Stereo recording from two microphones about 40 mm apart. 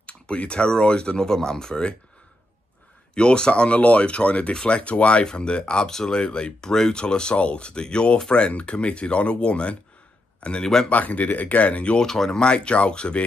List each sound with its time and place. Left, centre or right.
0.0 s speech: left
3.2 s speech: left
10.6 s speech: centre
10.9 s speech: left
12.0 s speech: centre
12.3 s speech: left